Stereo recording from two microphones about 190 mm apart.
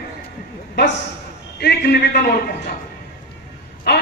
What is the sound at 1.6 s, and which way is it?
Speech, 60° left (ahead or behind).